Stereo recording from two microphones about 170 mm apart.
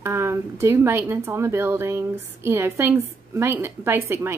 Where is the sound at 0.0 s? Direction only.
15° right (ahead or behind).